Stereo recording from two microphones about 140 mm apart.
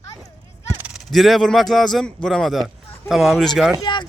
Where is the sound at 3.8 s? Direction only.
35° left (ahead or behind).